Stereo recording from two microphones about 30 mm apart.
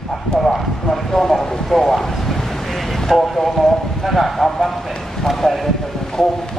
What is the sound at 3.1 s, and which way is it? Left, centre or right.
A man's voice, centre.